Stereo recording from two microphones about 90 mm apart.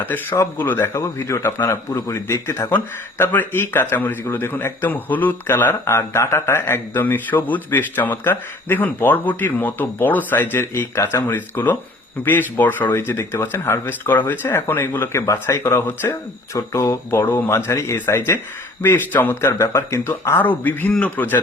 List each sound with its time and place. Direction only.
0.0 s a man's voice: 20° left (ahead or behind)